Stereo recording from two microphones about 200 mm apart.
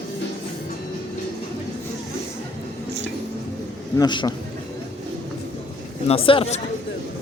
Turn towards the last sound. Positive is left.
turn(degrees=30)  # may be behind; listen again after turning